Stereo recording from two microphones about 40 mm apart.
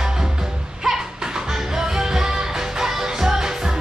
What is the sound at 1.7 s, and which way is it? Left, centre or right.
Music, centre.